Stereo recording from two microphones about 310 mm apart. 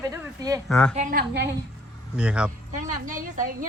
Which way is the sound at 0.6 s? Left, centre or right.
Centre.